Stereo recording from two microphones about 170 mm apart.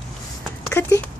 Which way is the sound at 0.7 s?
15° left (ahead or behind).